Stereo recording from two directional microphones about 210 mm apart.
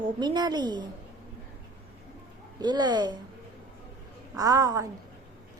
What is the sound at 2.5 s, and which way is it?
Speech, 20° right (ahead or behind).